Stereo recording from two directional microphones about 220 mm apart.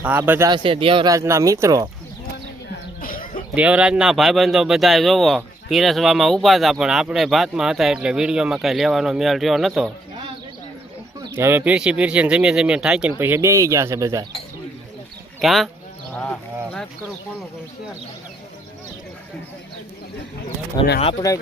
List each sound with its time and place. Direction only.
0.0 s speech: 10° right (ahead or behind)
3.0 s a sound: 40° left (ahead or behind)
3.5 s speech: 5° right (ahead or behind)
11.2 s speech: 10° right (ahead or behind)
15.4 s speech: centre (ahead or behind)
21.0 s speech: 20° left (ahead or behind)